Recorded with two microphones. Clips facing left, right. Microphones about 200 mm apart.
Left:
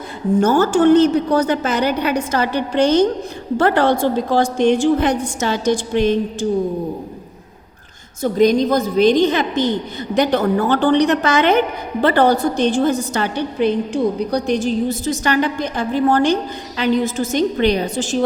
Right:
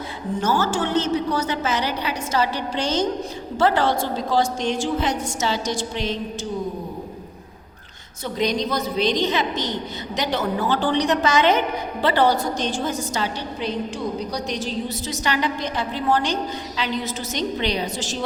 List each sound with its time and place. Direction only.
0.3 s a woman's voice: 50° left (ahead or behind)
8.2 s a woman's voice: 50° left (ahead or behind)